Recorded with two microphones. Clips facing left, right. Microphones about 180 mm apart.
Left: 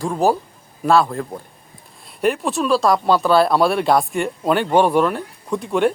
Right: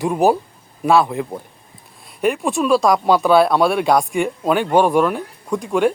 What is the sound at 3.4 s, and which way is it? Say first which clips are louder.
Speech: right 1 dB; centre (ahead or behind).